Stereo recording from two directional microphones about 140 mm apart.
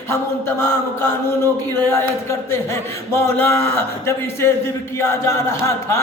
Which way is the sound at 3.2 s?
15° left (ahead or behind).